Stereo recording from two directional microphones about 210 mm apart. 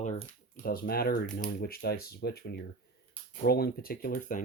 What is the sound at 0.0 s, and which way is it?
Speech, 40° left (ahead or behind).